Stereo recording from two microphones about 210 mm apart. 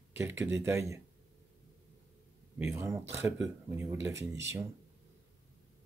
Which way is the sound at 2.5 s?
10° right (ahead or behind).